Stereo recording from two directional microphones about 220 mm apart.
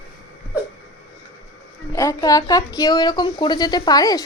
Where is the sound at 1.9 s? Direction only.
15° left (ahead or behind).